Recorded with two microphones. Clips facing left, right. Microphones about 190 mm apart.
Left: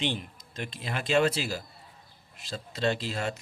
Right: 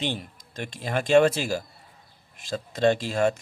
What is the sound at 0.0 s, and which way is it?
Speech, 45° right (ahead or behind).